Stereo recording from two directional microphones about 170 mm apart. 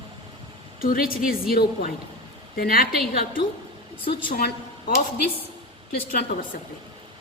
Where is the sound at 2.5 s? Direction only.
60° left (ahead or behind).